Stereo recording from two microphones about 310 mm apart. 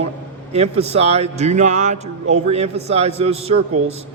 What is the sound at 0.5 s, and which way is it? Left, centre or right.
A man's voice, centre.